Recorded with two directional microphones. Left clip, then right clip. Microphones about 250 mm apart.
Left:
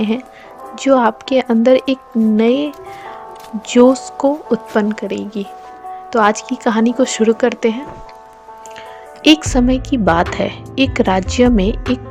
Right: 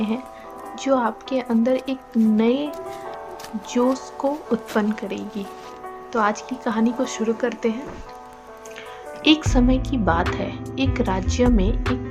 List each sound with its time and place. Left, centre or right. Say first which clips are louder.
0.8 s a woman's voice: left 8 dB; left
9.2 s speech: left 6 dB; left